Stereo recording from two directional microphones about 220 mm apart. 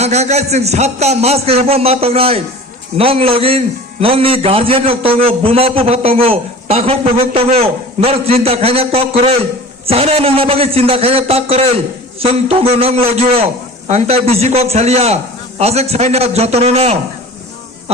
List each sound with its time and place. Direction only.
0.0 s a man's voice: 30° right (ahead or behind)